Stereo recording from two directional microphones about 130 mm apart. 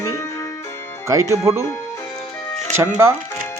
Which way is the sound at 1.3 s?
20° right (ahead or behind).